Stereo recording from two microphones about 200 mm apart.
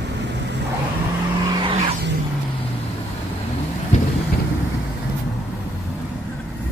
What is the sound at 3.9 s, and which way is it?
Vehicle, 35° left (ahead or behind).